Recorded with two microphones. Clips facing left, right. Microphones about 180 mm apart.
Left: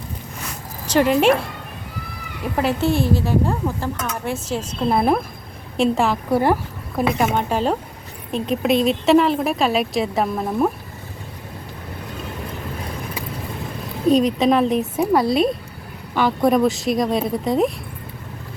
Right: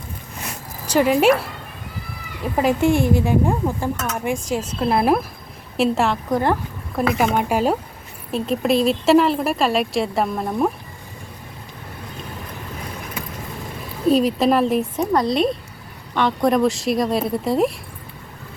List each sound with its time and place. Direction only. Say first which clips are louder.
0.9 s speech: even; 10° right (ahead or behind)
2.6 s a woman's voice: right 2 dB; 15° right (ahead or behind); by 7.0 s 10° left (ahead or behind)
7.3 s speech: right 1 dB; 10° right (ahead or behind)
14.1 s speech: left 1 dB; 5° right (ahead or behind)